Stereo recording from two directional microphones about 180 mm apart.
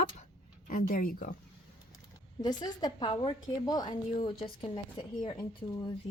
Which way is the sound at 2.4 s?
25° left (ahead or behind).